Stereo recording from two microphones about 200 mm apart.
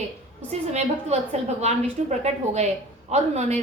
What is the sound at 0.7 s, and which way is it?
A woman's voice, 35° right (ahead or behind).